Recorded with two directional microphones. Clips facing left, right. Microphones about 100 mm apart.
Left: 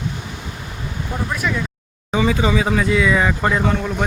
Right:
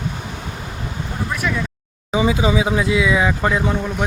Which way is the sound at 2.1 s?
10° right (ahead or behind).